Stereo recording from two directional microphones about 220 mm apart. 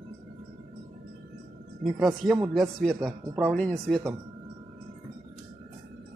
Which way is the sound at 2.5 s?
Centre (ahead or behind).